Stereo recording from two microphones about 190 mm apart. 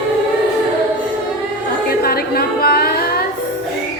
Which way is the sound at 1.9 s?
55° left (ahead or behind).